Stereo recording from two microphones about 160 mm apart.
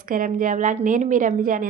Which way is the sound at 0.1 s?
55° right (ahead or behind).